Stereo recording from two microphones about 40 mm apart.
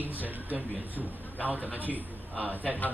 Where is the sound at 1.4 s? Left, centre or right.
Left.